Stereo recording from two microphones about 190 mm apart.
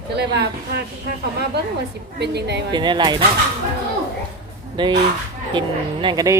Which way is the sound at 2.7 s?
25° right (ahead or behind).